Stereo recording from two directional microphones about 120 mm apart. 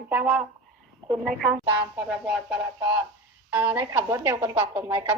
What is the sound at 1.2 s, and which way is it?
Speech, centre (ahead or behind).